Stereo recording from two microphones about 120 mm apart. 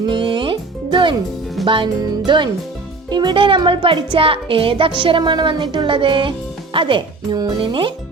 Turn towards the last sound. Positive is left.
turn(degrees=-45)  # may be behind; listen again after turning